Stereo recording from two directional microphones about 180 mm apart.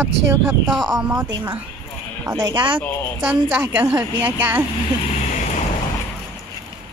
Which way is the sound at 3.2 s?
10° right (ahead or behind).